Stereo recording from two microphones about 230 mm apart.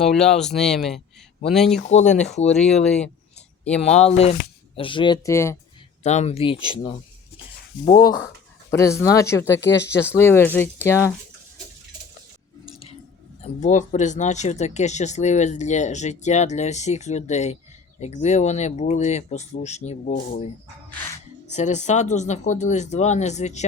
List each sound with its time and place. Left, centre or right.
0.0 s speech: centre
1.9 s speech: left
2.6 s speech: centre
4.0 s speech: left
6.0 s speech: left
7.9 s speech: centre
13.4 s speech: left
21.5 s speech: left